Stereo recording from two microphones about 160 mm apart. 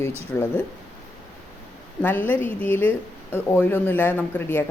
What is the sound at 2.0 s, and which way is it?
Speech, 10° left (ahead or behind).